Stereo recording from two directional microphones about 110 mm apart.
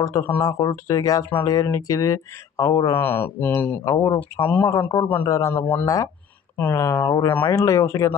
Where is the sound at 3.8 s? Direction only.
30° left (ahead or behind).